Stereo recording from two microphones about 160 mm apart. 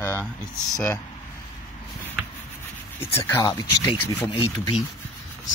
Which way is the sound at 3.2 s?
20° left (ahead or behind).